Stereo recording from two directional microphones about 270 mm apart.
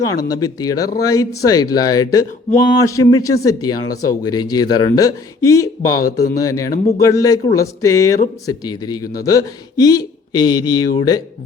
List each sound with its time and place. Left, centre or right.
0.0 s speech: centre
6.7 s speech: left
7.0 s speech: centre